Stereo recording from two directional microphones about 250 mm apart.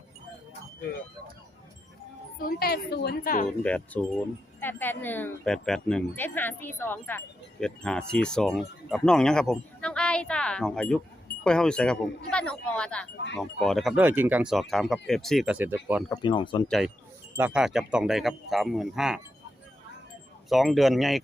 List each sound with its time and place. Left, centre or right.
2.4 s a woman's voice: left
3.6 s speech: centre
16.0 s speech: centre
16.6 s speech: centre
20.5 s speech: centre